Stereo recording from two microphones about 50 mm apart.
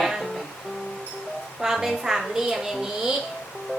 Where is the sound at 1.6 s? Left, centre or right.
Centre.